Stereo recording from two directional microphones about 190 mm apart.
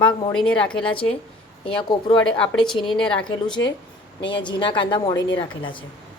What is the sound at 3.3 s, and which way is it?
A woman's voice, 25° left (ahead or behind).